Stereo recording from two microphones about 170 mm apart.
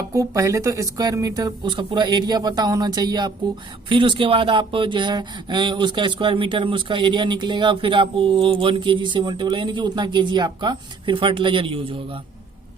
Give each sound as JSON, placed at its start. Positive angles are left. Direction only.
{"t": 0.1, "sound": "speech", "side_deg": -20}